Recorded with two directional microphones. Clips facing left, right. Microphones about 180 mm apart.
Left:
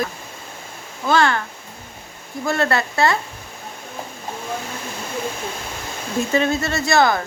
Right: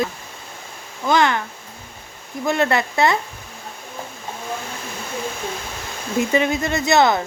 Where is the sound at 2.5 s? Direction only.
20° right (ahead or behind).